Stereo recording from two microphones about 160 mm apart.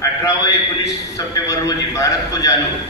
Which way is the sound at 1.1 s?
20° left (ahead or behind).